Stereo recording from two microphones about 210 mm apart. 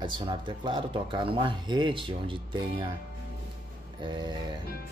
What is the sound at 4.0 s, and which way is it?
Speech, 20° right (ahead or behind).